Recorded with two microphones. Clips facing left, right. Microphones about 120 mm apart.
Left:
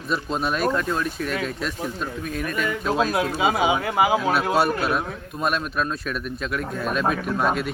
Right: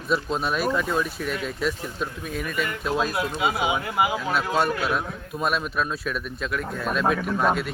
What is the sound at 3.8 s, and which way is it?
Speech, 90° left.